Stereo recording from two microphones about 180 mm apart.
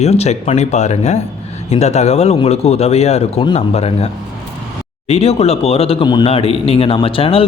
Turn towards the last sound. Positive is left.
turn(degrees=30)  # may be behind; listen again after turning